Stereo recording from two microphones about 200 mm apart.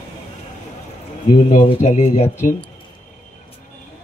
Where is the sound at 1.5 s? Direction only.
35° left (ahead or behind).